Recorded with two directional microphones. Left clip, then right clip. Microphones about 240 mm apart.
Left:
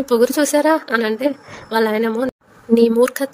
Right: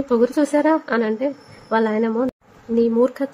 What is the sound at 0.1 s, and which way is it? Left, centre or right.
A woman's voice, left.